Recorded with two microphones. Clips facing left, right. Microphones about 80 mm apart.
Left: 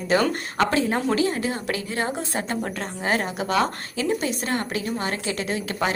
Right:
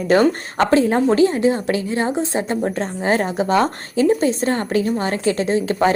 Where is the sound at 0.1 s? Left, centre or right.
Right.